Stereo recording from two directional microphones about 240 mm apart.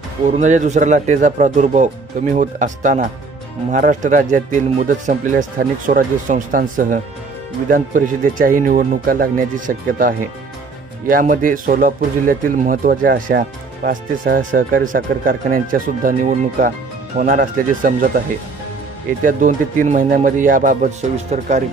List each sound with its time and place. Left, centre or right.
0.4 s speech: right
19.2 s speech: right